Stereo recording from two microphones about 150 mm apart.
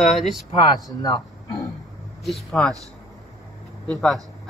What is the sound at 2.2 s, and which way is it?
Speech, centre (ahead or behind).